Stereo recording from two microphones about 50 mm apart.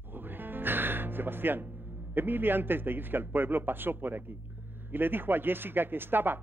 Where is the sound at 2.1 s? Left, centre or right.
Right.